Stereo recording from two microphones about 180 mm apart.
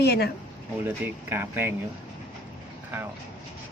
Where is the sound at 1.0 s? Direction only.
10° right (ahead or behind).